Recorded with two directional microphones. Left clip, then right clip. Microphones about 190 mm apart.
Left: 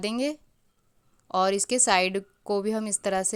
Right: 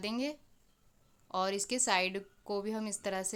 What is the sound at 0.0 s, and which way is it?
A woman's voice, 35° left (ahead or behind).